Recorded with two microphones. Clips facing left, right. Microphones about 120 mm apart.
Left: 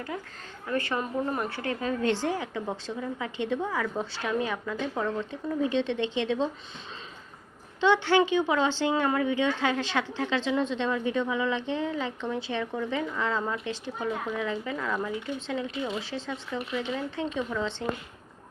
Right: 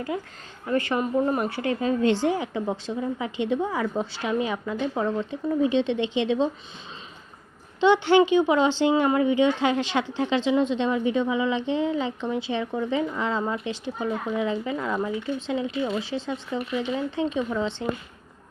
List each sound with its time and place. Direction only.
0.7 s a woman's voice: 20° right (ahead or behind)
7.8 s a woman's voice: 20° right (ahead or behind)